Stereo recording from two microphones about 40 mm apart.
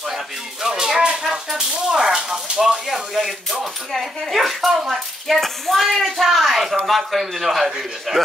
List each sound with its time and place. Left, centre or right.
0.1 s a sound: centre
1.2 s speech: centre
2.9 s speech: centre